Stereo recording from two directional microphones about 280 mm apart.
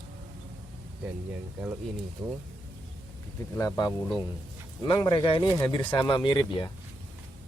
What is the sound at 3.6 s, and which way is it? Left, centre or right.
Speech, centre.